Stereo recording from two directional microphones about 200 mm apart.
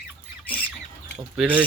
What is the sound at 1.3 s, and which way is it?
Speech, 5° right (ahead or behind).